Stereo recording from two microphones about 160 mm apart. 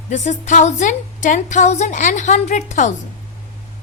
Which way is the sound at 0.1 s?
50° left (ahead or behind).